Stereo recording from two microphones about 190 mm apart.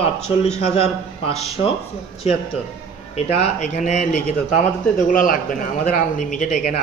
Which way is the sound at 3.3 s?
40° left (ahead or behind).